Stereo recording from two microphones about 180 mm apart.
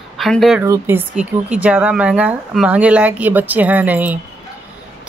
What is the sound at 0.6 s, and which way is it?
Speech, 15° right (ahead or behind).